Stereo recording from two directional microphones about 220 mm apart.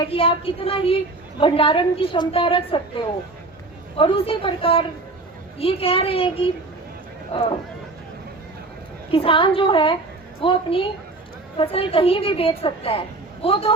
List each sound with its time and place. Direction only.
0.0 s a woman's voice: 25° left (ahead or behind)
9.1 s a woman's voice: 25° left (ahead or behind)